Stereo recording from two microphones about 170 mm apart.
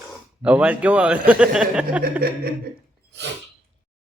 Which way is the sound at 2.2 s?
65° right (ahead or behind).